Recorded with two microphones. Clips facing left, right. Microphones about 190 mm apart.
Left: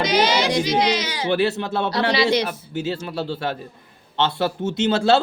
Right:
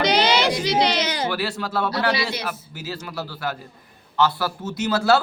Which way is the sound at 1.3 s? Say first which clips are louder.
Left 6 dB; 25° left (ahead or behind).